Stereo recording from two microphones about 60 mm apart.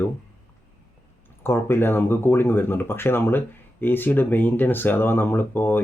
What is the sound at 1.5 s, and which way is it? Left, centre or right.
Speech, left.